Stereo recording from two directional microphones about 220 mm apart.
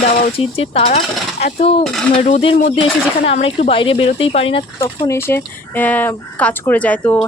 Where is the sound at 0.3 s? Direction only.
25° left (ahead or behind).